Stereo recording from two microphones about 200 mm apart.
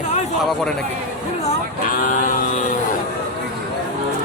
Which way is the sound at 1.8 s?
40° left (ahead or behind).